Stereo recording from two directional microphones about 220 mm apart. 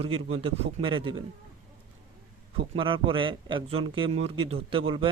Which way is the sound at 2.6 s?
25° right (ahead or behind).